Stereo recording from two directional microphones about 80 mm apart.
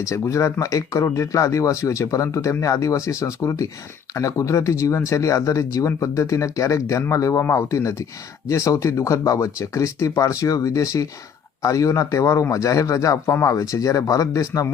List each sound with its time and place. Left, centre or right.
0.0 s speech: left